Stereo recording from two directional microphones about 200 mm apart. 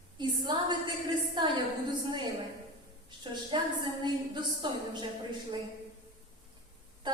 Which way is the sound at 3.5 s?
25° right (ahead or behind).